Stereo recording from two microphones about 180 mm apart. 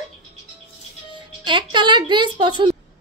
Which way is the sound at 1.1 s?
25° right (ahead or behind).